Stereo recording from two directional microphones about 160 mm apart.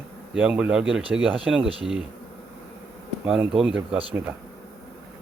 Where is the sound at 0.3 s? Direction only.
5° right (ahead or behind).